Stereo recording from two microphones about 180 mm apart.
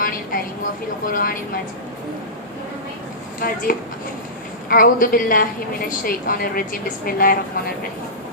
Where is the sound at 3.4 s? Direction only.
55° left (ahead or behind).